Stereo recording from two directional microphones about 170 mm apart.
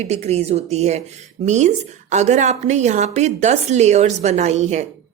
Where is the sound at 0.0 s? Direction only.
40° right (ahead or behind).